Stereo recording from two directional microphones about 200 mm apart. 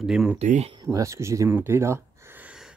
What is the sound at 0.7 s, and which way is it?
Speech, 20° right (ahead or behind).